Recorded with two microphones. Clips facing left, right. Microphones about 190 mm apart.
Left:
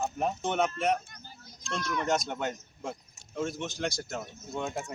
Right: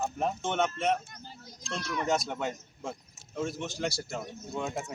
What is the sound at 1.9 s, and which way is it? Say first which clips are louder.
Speech: even; 5° right (ahead or behind).